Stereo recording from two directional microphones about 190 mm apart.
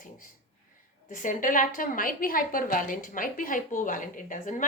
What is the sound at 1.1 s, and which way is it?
A woman's voice, 45° left (ahead or behind).